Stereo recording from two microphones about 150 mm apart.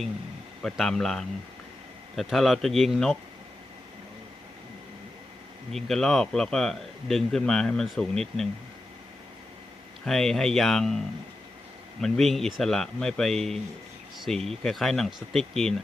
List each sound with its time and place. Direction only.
0.6 s speech: centre (ahead or behind)
5.7 s speech: centre (ahead or behind)
10.1 s speech: 5° left (ahead or behind)